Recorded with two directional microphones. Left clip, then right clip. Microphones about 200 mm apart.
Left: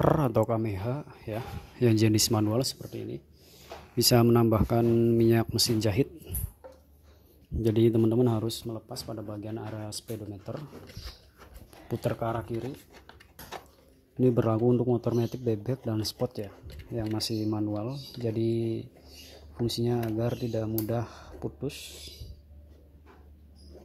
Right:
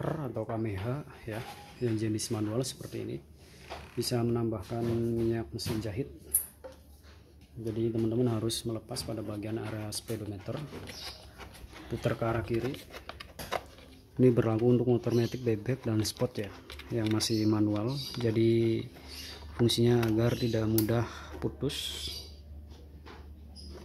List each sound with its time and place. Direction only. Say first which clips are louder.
0.0 s speech: left 11 dB; 35° left (ahead or behind)
0.6 s speech: left 3 dB; 20° left (ahead or behind)
1.8 s speech: left 8 dB; 35° left (ahead or behind); by 3.2 s 20° left (ahead or behind)
4.0 s speech: left 9 dB; 40° left (ahead or behind)
7.6 s speech: left 8 dB; 40° left (ahead or behind)
8.4 s speech: even; 10° left (ahead or behind)
12.0 s speech: even; 15° left (ahead or behind)
14.2 s speech: left 1 dB; 15° left (ahead or behind)